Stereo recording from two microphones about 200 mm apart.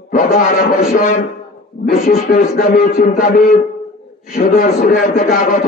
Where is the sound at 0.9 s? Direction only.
40° left (ahead or behind).